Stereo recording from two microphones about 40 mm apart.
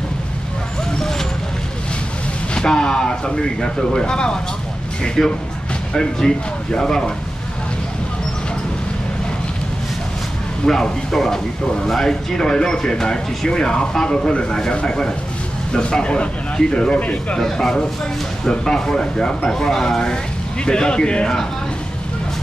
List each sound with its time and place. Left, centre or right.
2.5 s speech: left
10.7 s speech: centre
17.0 s speech: left
17.4 s speech: centre